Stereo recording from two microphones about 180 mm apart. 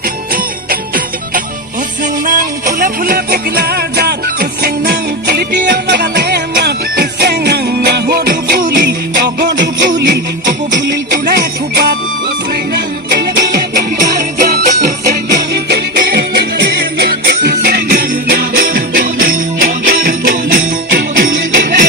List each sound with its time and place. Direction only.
0.7 s jingle bell: 50° right (ahead or behind)
2.2 s music: 50° right (ahead or behind); by 9.5 s 65° right (ahead or behind)
11.1 s music: 60° right (ahead or behind)